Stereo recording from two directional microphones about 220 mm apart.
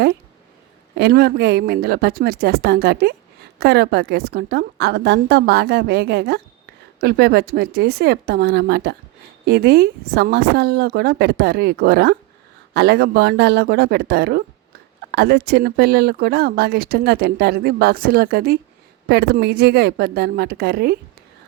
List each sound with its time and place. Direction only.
0.9 s speech: 45° right (ahead or behind)